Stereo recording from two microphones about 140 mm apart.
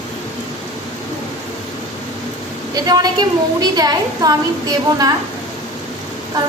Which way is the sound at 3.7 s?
30° right (ahead or behind).